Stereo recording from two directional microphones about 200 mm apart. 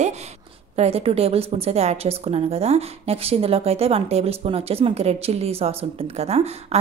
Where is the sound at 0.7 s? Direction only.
30° right (ahead or behind).